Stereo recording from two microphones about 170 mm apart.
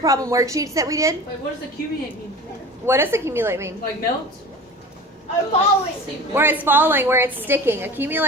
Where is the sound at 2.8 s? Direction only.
15° right (ahead or behind).